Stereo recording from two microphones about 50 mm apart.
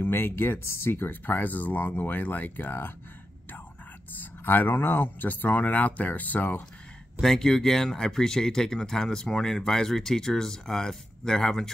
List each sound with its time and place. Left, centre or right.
0.0 s speech: left
1.2 s speech: left
4.2 s speech: left
7.2 s speech: centre